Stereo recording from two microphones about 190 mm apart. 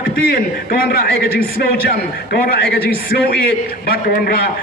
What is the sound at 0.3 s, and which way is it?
A man's voice, 55° left (ahead or behind).